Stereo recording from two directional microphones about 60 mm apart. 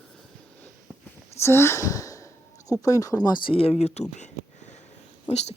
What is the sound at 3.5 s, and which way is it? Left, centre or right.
Speech, centre.